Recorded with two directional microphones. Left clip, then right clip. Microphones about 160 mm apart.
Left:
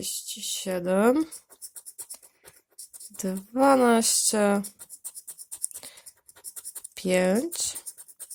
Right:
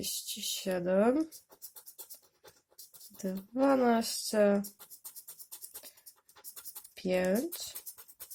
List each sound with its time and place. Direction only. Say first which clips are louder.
0.0 s speech: left 3 dB; 20° left (ahead or behind); by 1.3 s 50° left (ahead or behind)
3.2 s speech: left 7 dB; 55° left (ahead or behind)
5.8 s a sound: left 9 dB; 50° left (ahead or behind)
6.9 s speech: left 7 dB; 50° left (ahead or behind)